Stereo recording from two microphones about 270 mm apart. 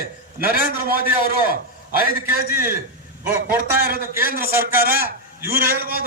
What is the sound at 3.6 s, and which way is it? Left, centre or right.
A man's voice, right.